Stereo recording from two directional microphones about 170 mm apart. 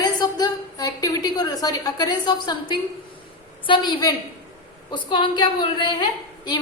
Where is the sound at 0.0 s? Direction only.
25° left (ahead or behind).